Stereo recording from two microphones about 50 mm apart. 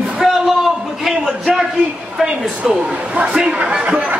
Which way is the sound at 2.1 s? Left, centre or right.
Centre.